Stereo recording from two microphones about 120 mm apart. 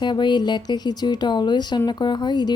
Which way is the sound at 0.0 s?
40° left (ahead or behind).